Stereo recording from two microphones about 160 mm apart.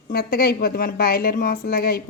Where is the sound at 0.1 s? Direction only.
70° left (ahead or behind).